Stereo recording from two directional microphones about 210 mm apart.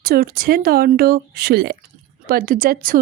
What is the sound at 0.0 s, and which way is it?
Speech, 45° right (ahead or behind).